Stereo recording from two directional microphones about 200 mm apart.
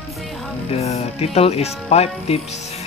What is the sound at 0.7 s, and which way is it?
Speech, 30° left (ahead or behind).